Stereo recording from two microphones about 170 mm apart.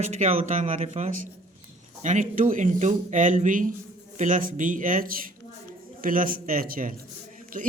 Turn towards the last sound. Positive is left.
turn(degrees=-55)  # may be behind; listen again after turning